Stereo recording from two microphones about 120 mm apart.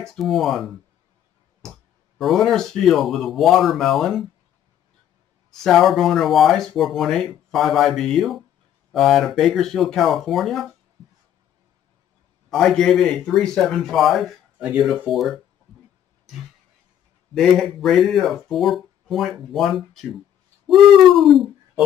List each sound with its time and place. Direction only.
0.0 s speech: 5° left (ahead or behind)
2.1 s speech: centre (ahead or behind)
5.5 s speech: centre (ahead or behind)
12.4 s speech: 5° left (ahead or behind)
14.6 s speech: 10° right (ahead or behind)
14.9 s speech: centre (ahead or behind)
17.3 s speech: 5° left (ahead or behind)